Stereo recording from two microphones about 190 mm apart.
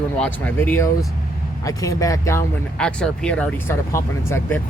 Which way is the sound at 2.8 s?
5° left (ahead or behind).